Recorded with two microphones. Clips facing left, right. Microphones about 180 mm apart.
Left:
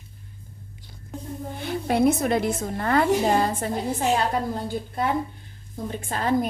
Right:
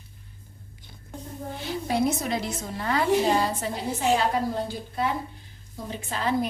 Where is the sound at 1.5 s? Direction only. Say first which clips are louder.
Left 3 dB; 55° left (ahead or behind).